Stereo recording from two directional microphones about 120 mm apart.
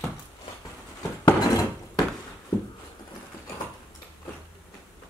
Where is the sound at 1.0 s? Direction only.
30° left (ahead or behind).